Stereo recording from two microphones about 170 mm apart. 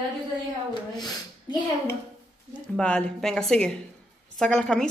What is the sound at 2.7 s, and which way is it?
A woman's voice, 5° left (ahead or behind).